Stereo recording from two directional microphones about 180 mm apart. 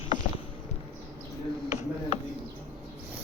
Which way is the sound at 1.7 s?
40° left (ahead or behind).